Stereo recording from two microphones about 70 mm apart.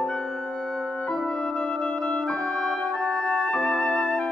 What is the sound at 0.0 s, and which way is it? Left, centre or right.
Music, centre.